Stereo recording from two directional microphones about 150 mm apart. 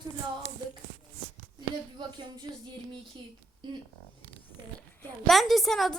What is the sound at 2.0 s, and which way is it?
Speech, 30° right (ahead or behind).